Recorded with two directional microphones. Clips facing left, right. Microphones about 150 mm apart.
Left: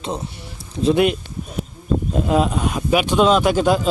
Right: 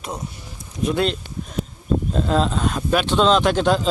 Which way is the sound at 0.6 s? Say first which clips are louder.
Left 5 dB; 30° left (ahead or behind).